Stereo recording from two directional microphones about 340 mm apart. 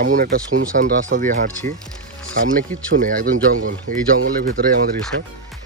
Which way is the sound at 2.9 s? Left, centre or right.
Right.